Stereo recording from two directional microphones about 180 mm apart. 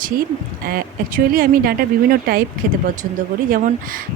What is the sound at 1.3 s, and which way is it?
Speech, 55° right (ahead or behind).